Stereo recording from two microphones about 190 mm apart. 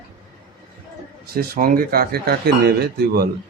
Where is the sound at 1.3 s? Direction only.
50° right (ahead or behind).